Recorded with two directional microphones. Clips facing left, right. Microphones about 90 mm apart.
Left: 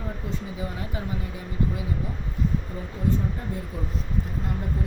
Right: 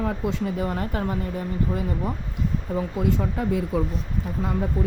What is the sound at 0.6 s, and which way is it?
Speech, 55° right (ahead or behind).